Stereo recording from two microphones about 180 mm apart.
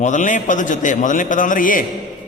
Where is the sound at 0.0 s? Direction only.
45° left (ahead or behind).